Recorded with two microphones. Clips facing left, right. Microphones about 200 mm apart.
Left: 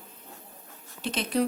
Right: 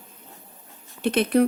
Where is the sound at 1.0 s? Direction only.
60° right (ahead or behind).